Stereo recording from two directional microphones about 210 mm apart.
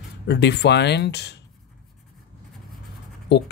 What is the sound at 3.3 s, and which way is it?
Speech, 55° left (ahead or behind).